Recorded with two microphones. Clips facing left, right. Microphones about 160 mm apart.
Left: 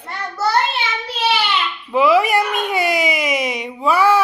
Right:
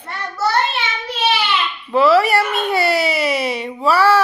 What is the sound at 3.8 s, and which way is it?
Speech, 10° left (ahead or behind).